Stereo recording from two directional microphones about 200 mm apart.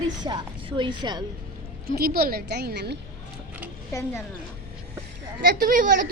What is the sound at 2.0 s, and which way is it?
A woman's voice, 50° right (ahead or behind).